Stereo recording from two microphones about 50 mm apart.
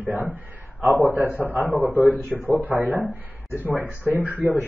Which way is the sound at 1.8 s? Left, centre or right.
Left.